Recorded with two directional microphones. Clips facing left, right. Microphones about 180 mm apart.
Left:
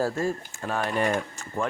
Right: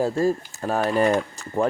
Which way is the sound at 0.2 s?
35° right (ahead or behind).